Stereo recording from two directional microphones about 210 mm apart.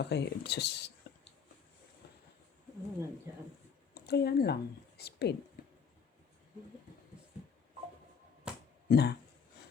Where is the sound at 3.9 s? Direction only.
50° left (ahead or behind).